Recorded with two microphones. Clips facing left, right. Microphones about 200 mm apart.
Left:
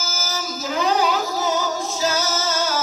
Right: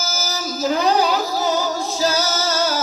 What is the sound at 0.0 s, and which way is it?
Music, 40° right (ahead or behind).